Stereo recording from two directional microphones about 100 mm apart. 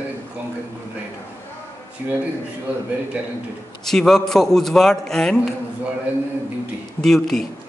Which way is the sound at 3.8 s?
5° left (ahead or behind).